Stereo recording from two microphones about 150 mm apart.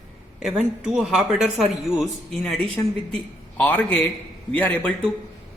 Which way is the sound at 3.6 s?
10° left (ahead or behind).